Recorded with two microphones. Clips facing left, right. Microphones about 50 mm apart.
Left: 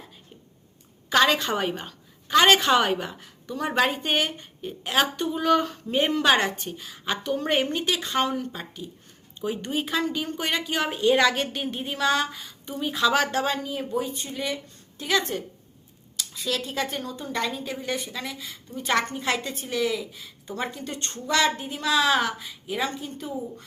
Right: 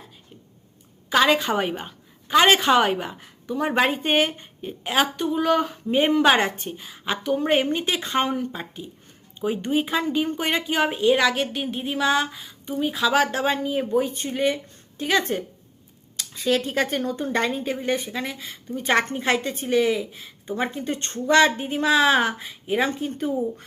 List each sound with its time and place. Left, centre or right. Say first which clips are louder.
1.1 s a woman's voice: right 2 dB; centre
11.1 s a woman's voice: right 1 dB; centre
13.5 s speech: right 5 dB; right